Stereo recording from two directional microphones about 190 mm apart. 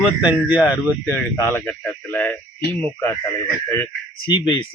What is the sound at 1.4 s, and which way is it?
Speech, 10° left (ahead or behind).